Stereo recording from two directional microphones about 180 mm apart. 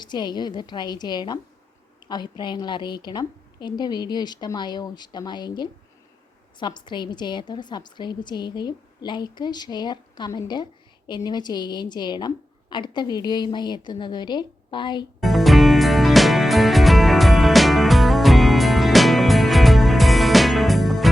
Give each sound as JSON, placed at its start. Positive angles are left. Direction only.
{"t": 0.0, "sound": "a woman's voice", "side_deg": 25}
{"t": 15.2, "sound": "music", "side_deg": 0}